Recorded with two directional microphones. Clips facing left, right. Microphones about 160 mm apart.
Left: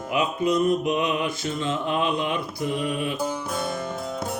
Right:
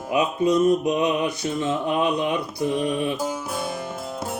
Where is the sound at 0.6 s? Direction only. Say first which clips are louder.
Right 3 dB; 20° right (ahead or behind).